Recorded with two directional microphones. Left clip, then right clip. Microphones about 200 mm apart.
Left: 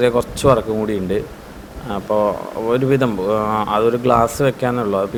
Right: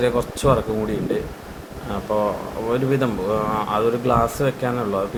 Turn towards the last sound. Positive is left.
turn(degrees=35)  # may be behind; listen again after turning